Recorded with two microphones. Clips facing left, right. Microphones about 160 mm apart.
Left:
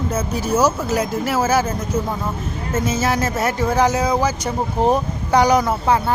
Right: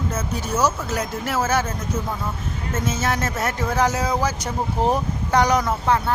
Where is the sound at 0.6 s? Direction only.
5° left (ahead or behind).